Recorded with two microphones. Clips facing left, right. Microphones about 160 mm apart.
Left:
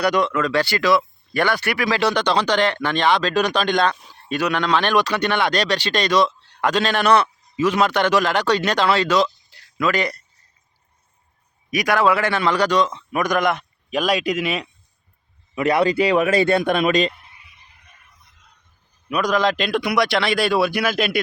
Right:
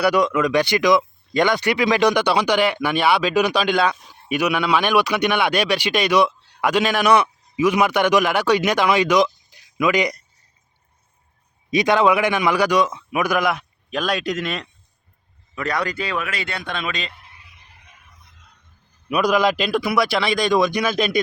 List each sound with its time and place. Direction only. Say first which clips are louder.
0.0 s speech: right 2 dB; 10° right (ahead or behind)
11.7 s speech: right 2 dB; 25° right (ahead or behind); by 14.7 s 5° left (ahead or behind)
15.5 s speech: left 7 dB; 25° left (ahead or behind)
16.6 s a man's voice: left 10 dB; 50° left (ahead or behind)
19.1 s a man's voice: right 2 dB; 10° right (ahead or behind)